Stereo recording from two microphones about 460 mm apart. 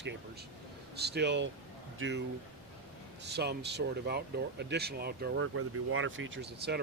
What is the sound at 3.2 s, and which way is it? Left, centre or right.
Speech, right.